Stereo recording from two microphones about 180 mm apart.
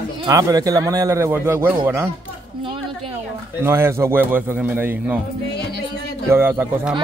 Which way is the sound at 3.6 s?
15° right (ahead or behind).